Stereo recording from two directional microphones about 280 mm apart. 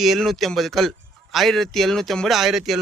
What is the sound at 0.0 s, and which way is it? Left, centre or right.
A man's voice, centre.